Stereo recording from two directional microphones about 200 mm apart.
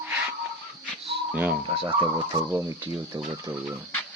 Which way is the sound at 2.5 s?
15° right (ahead or behind).